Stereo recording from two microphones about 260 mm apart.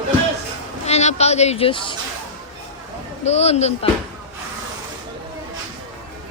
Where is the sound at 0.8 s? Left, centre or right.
Left.